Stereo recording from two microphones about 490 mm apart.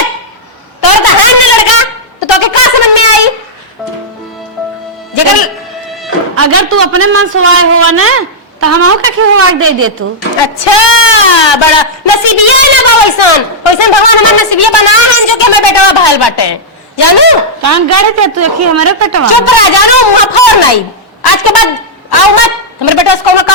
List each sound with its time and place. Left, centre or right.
0.8 s a sound: left
6.4 s a man's voice: right
10.4 s a woman's voice: left
17.6 s a woman's voice: right
19.3 s a woman's voice: left